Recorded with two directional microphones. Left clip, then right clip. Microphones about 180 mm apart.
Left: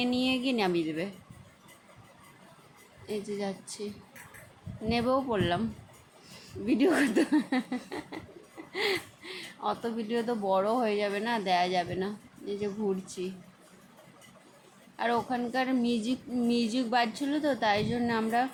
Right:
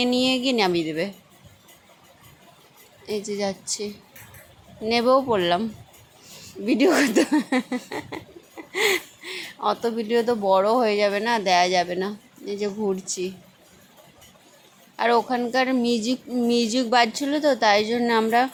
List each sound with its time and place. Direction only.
0.0 s speech: 25° right (ahead or behind)
3.1 s speech: 25° right (ahead or behind)
4.9 s speech: 25° right (ahead or behind)
6.7 s speech: 25° right (ahead or behind)
14.9 s speech: 30° right (ahead or behind)